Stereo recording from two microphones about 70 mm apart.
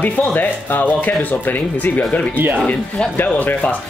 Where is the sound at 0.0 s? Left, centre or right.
Left.